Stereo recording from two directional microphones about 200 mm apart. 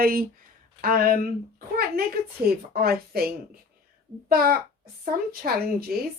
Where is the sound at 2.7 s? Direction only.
50° right (ahead or behind).